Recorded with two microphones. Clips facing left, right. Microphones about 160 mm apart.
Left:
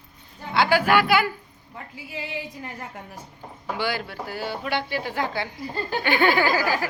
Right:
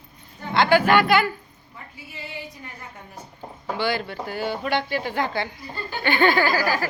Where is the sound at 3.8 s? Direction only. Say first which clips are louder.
Right 3 dB; 10° left (ahead or behind).